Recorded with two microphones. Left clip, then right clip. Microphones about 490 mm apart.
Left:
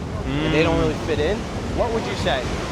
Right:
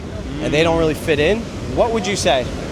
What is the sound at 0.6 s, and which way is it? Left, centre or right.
Speech, right.